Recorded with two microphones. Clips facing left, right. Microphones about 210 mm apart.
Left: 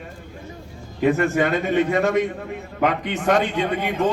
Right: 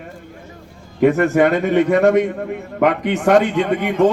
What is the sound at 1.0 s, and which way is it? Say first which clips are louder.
A man's voice: right 5 dB; 60° right (ahead or behind).